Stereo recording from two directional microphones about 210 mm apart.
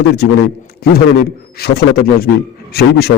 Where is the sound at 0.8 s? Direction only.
45° left (ahead or behind).